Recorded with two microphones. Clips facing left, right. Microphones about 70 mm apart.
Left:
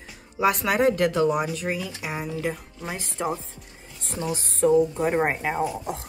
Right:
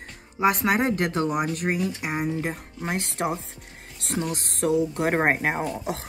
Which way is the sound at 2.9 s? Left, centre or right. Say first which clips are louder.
Right 3 dB; right.